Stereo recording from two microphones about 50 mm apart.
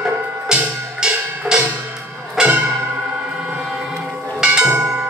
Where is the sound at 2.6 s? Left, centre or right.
Right.